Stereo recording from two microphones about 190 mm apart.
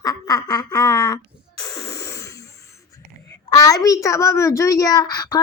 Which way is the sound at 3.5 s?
20° left (ahead or behind).